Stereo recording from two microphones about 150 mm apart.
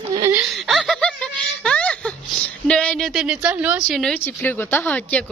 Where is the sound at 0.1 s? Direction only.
20° right (ahead or behind).